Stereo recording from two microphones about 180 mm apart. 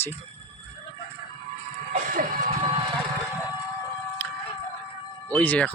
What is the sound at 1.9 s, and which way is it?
Music, 50° right (ahead or behind).